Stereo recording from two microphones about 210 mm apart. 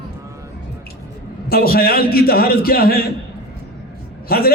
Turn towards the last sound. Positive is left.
turn(degrees=45)  # may be behind; listen again after turning